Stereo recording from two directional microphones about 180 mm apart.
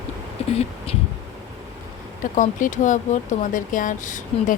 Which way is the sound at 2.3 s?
45° left (ahead or behind).